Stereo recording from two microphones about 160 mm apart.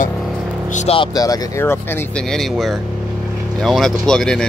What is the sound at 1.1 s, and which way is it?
Speech, 20° left (ahead or behind).